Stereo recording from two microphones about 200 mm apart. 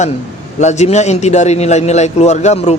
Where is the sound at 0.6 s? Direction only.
35° left (ahead or behind).